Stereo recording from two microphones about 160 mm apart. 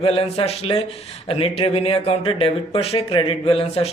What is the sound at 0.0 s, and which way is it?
Speech, 35° left (ahead or behind).